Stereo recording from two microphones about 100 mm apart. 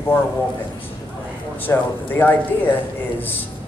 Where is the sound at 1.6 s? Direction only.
20° left (ahead or behind).